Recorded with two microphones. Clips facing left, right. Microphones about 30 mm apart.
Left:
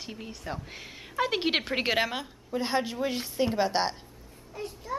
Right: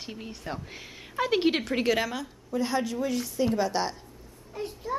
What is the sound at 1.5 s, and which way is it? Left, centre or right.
A woman's voice, left.